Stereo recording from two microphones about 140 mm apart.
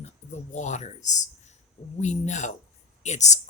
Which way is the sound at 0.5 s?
55° left (ahead or behind).